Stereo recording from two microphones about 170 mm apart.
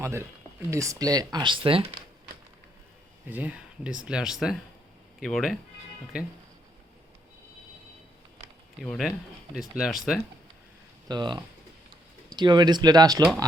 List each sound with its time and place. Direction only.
0.0 s speech: 15° right (ahead or behind); by 1.9 s 30° right (ahead or behind)
3.2 s speech: 10° right (ahead or behind)
8.8 s speech: centre (ahead or behind)
11.1 s speech: 25° right (ahead or behind)